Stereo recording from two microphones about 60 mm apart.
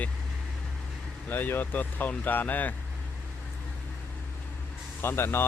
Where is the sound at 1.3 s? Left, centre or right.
Left.